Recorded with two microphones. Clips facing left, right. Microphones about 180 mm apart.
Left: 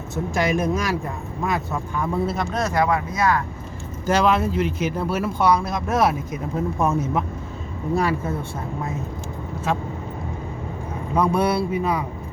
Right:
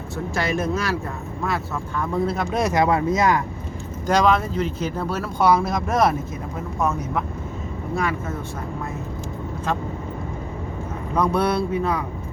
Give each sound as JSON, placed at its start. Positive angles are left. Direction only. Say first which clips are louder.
{"t": 0.3, "sound": "speech", "louder": "left 2 dB", "side_deg": 15}
{"t": 2.5, "sound": "speech", "louder": "right 3 dB", "side_deg": -15}
{"t": 4.0, "sound": "speech", "louder": "even", "side_deg": 5}
{"t": 5.4, "sound": "speech", "louder": "right 3 dB", "side_deg": 0}
{"t": 6.8, "sound": "speech", "louder": "even", "side_deg": 25}
{"t": 11.1, "sound": "speech", "louder": "left 1 dB", "side_deg": 10}